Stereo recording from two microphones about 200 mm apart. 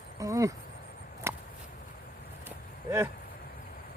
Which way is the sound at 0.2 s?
15° right (ahead or behind).